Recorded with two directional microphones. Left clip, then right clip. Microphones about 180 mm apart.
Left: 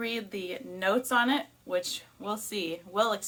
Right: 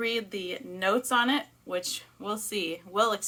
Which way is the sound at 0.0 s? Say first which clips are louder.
Right 4 dB; 15° right (ahead or behind).